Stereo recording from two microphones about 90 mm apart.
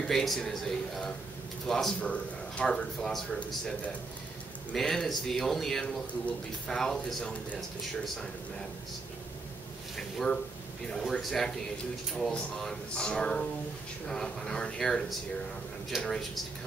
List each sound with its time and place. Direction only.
0.0 s speech: 5° left (ahead or behind)
3.3 s speech: 15° left (ahead or behind)
4.7 s speech: 5° left (ahead or behind)
9.9 s speech: 5° left (ahead or behind)